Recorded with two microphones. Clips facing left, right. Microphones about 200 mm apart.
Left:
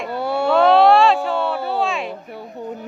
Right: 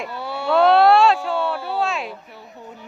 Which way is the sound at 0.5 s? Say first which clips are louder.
Left 1 dB; centre (ahead or behind).